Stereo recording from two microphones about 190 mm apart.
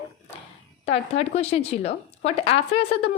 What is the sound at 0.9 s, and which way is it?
A woman's voice, 35° left (ahead or behind).